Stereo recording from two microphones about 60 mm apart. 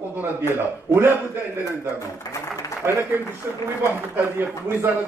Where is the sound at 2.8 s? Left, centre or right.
Right.